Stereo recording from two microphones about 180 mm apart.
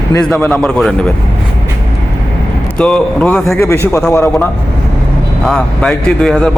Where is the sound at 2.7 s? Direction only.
5° left (ahead or behind).